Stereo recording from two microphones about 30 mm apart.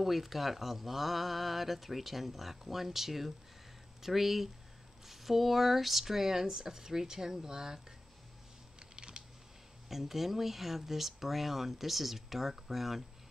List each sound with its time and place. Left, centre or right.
0.0 s speech: centre
8.7 s typing: right
9.8 s speech: centre